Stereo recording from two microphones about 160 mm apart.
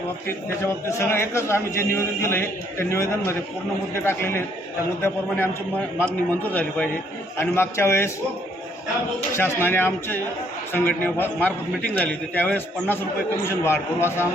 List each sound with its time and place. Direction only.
0.3 s a man's voice: 15° left (ahead or behind)
6.0 s a man's voice: 10° left (ahead or behind)
9.3 s a man's voice: 15° left (ahead or behind)